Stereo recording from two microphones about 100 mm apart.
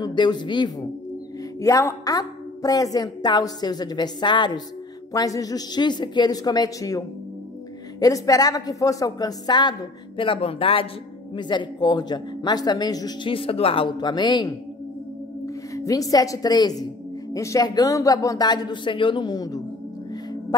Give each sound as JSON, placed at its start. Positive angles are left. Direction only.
{"t": 0.0, "sound": "a woman's voice", "side_deg": 50}
{"t": 1.6, "sound": "a woman's voice", "side_deg": 30}
{"t": 5.1, "sound": "a woman's voice", "side_deg": 40}
{"t": 11.3, "sound": "a woman's voice", "side_deg": 50}
{"t": 13.3, "sound": "speech", "side_deg": 70}
{"t": 13.8, "sound": "a woman's voice", "side_deg": 45}
{"t": 15.4, "sound": "a woman's voice", "side_deg": 35}